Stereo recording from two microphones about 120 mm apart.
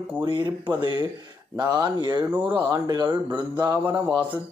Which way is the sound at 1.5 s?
30° right (ahead or behind).